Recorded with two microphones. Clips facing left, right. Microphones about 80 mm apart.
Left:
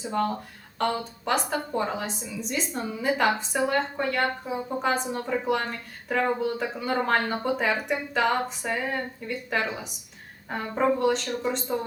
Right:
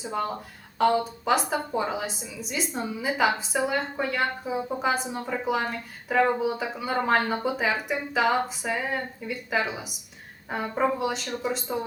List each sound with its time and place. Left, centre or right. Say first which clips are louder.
0.0 s a woman's voice: left 2 dB; centre